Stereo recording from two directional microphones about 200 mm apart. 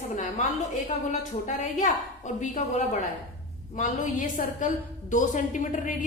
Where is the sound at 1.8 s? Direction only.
35° left (ahead or behind).